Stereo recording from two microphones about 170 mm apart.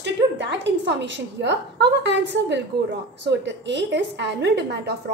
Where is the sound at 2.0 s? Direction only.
90° right.